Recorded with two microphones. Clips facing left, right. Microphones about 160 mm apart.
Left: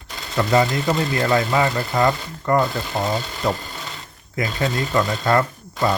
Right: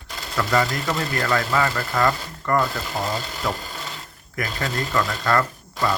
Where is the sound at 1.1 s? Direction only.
25° left (ahead or behind).